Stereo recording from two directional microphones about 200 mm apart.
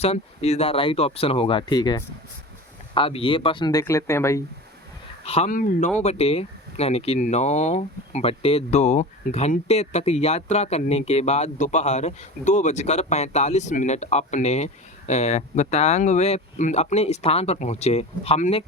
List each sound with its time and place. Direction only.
0.0 s speech: 30° left (ahead or behind); by 4.4 s 15° left (ahead or behind)
5.2 s speech: 30° left (ahead or behind)
6.0 s speech: 30° left (ahead or behind)